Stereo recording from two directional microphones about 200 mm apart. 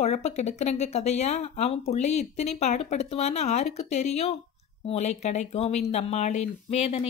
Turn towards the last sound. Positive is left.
turn(degrees=30)  # may be behind; listen again after turning